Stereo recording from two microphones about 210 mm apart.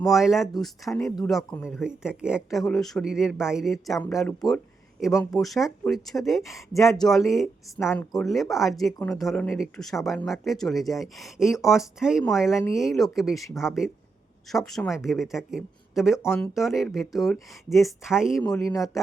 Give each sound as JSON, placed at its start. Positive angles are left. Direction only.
{"t": 0.0, "sound": "speech", "side_deg": 0}
{"t": 14.5, "sound": "speech", "side_deg": 5}
{"t": 18.6, "sound": "speech", "side_deg": 15}